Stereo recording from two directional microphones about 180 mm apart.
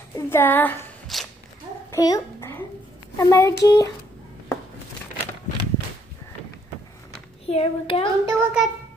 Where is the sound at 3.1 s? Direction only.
15° left (ahead or behind).